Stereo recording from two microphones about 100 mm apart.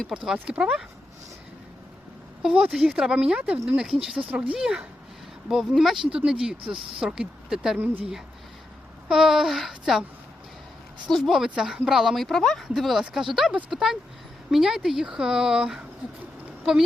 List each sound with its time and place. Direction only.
0.1 s speech: 5° right (ahead or behind)
2.4 s speech: 5° right (ahead or behind)
9.0 s speech: 5° right (ahead or behind)
11.1 s speech: centre (ahead or behind)